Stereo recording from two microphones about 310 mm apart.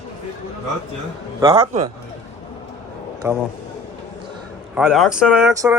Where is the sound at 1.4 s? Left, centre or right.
Centre.